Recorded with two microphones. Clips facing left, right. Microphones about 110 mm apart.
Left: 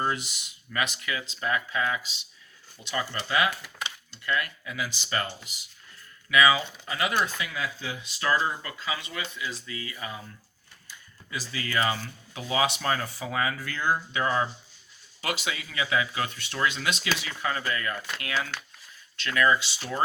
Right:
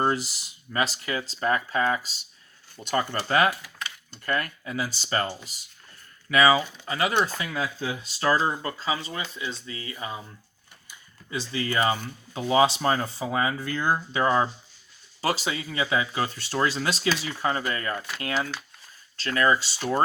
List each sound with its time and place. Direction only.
0.0 s speech: 35° right (ahead or behind)
7.3 s speech: 40° right (ahead or behind); by 10.2 s 25° right (ahead or behind)
11.3 s speech: 30° right (ahead or behind)
19.1 s speech: 35° right (ahead or behind)